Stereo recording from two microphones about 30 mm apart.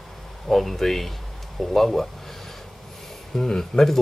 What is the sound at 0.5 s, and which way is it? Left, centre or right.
Speech, centre.